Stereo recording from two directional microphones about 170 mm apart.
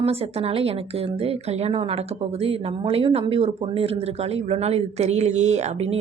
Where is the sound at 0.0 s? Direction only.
35° right (ahead or behind).